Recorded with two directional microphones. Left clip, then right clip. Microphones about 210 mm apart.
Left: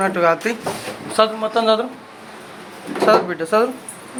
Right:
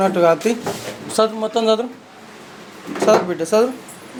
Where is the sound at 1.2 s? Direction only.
40° right (ahead or behind).